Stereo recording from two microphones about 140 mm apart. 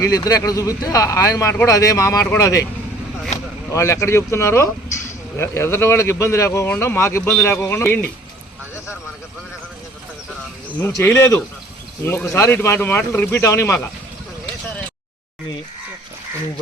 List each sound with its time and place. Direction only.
0.0 s speech: 25° left (ahead or behind)
3.7 s speech: 20° left (ahead or behind)
10.8 s speech: 15° left (ahead or behind)